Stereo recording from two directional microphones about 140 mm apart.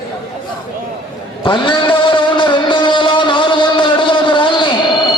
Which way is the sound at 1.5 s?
35° left (ahead or behind).